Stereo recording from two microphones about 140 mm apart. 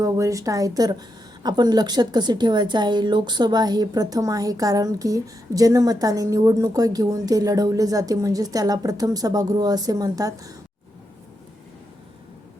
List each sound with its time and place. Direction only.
0.0 s a woman's voice: 25° right (ahead or behind)